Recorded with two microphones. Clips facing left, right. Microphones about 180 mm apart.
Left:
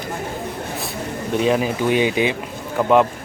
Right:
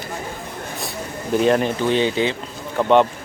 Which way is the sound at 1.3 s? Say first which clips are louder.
Right 2 dB; centre (ahead or behind).